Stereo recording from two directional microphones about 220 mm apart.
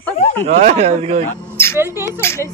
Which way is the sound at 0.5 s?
30° right (ahead or behind).